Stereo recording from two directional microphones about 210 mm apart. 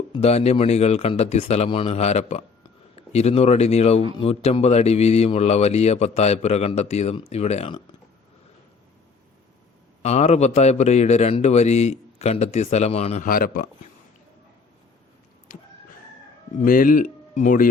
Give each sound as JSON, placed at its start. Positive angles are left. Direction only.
{"t": 0.1, "sound": "a man's voice", "side_deg": 30}
{"t": 10.0, "sound": "a man's voice", "side_deg": 30}
{"t": 13.2, "sound": "speech", "side_deg": 45}
{"t": 15.5, "sound": "chicken", "side_deg": 40}
{"t": 16.6, "sound": "speech", "side_deg": 40}